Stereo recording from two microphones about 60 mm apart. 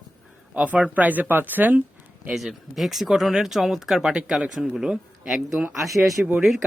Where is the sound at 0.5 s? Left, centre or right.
Right.